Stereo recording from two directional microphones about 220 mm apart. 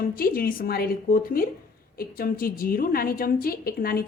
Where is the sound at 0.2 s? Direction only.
40° left (ahead or behind).